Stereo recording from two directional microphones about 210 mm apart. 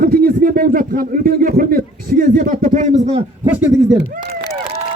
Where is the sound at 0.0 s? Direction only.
45° right (ahead or behind).